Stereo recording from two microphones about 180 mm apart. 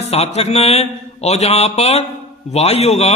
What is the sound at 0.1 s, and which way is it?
A man's voice, 35° left (ahead or behind).